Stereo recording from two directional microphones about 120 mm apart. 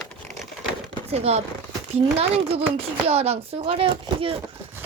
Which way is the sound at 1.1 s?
60° right (ahead or behind).